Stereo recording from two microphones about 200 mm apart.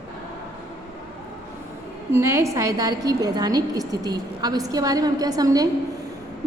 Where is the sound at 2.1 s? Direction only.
15° right (ahead or behind).